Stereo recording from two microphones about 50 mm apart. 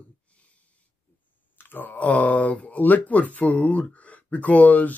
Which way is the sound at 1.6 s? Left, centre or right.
Left.